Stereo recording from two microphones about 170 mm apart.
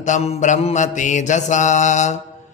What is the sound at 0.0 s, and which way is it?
A man's voice, 40° left (ahead or behind).